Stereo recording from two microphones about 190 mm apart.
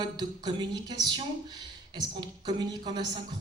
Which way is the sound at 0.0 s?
20° right (ahead or behind).